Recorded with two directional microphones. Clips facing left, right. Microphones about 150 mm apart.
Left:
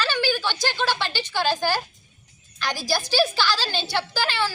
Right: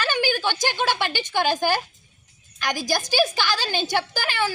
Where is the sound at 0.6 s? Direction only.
15° right (ahead or behind).